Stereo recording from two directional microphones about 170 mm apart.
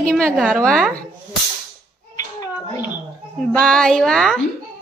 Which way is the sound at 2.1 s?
20° left (ahead or behind).